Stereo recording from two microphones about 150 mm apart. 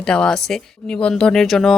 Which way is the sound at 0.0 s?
5° left (ahead or behind).